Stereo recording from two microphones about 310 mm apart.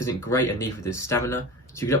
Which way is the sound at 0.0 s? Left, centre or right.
Centre.